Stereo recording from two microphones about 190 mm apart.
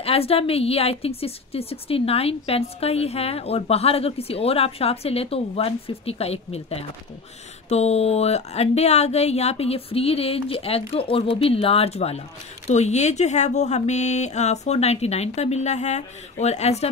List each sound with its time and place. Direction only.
0.0 s a woman's voice: 30° left (ahead or behind)